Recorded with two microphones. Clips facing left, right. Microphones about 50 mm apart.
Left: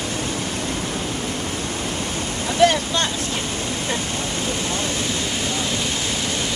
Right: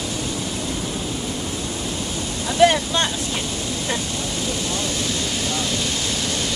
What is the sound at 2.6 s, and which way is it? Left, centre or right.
Speech, right.